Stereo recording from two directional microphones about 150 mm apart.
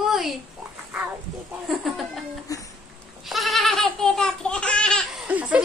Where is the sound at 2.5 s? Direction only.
20° left (ahead or behind).